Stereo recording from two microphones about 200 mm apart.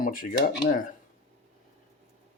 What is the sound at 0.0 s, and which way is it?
Speech, 45° left (ahead or behind).